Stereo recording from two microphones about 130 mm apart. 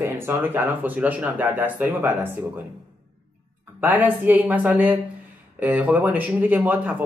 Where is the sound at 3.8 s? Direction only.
15° right (ahead or behind).